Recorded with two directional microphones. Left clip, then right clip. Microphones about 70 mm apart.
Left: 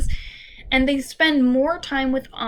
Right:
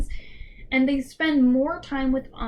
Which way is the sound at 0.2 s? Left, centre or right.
Left.